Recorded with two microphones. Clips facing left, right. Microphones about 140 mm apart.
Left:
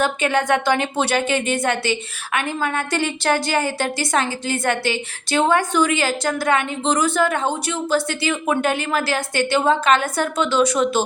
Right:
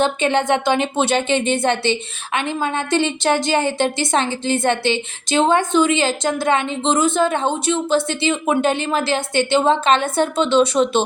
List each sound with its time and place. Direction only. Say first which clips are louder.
0.0 s a woman's voice: right 2 dB; 25° right (ahead or behind)